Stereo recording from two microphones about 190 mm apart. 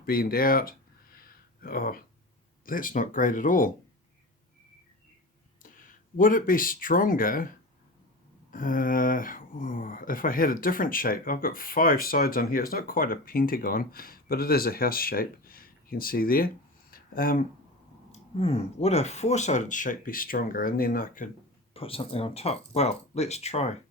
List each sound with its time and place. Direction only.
0.0 s speech: 50° left (ahead or behind)
1.1 s a sound: 50° left (ahead or behind)
2.6 s speech: 45° left (ahead or behind)
5.6 s speech: 45° left (ahead or behind)
16.9 s a sound: 50° left (ahead or behind)
18.1 s speech: 30° left (ahead or behind); by 21.2 s 50° left (ahead or behind)
21.7 s speech: 30° left (ahead or behind)